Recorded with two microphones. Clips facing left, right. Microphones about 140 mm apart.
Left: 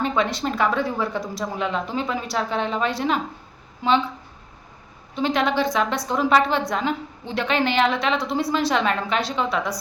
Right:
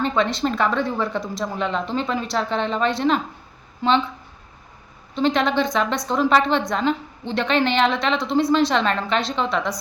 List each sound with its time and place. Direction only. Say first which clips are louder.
0.0 s a woman's voice: right 2 dB; 10° left (ahead or behind)
5.1 s a woman's voice: right 2 dB; 5° left (ahead or behind)